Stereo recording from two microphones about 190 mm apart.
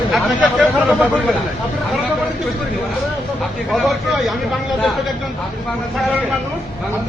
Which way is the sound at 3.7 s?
Centre (ahead or behind).